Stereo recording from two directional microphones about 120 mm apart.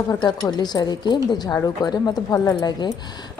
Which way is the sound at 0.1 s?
35° left (ahead or behind).